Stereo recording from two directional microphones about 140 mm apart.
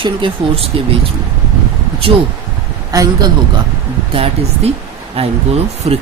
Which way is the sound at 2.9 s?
25° right (ahead or behind).